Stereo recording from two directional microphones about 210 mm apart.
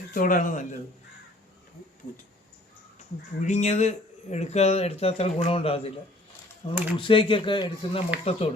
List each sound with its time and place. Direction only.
0.1 s speech: 40° left (ahead or behind)
3.4 s speech: 35° left (ahead or behind)
6.9 s speech: 25° left (ahead or behind)